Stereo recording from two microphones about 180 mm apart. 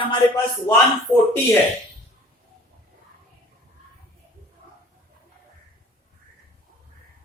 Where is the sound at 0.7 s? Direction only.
20° left (ahead or behind).